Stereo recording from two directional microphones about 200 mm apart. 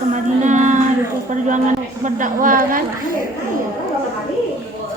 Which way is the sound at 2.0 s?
40° right (ahead or behind).